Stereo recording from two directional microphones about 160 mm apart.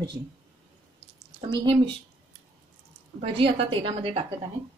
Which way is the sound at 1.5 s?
35° right (ahead or behind).